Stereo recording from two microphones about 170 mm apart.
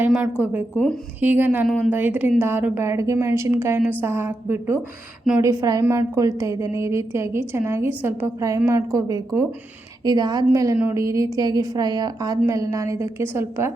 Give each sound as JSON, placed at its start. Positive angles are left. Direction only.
{"t": 0.0, "sound": "a woman's voice", "side_deg": -10}
{"t": 1.6, "sound": "a woman's voice", "side_deg": 0}
{"t": 1.9, "sound": "a woman's voice", "side_deg": -10}